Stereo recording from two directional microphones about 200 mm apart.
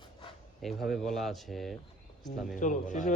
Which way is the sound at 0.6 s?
Centre (ahead or behind).